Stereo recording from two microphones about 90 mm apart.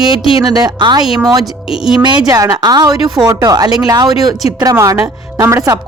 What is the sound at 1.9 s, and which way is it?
A woman's voice, 45° right (ahead or behind).